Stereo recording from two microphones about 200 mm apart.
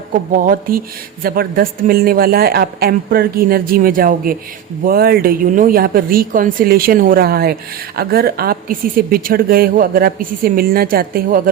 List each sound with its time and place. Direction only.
0.1 s a woman's voice: 45° right (ahead or behind)